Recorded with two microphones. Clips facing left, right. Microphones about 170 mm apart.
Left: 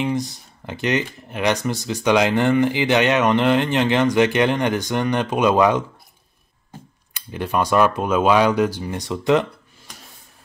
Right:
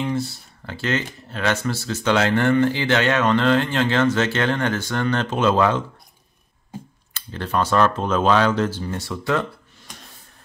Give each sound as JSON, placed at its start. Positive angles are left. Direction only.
{"t": 0.0, "sound": "speech", "side_deg": 15}
{"t": 7.2, "sound": "speech", "side_deg": 15}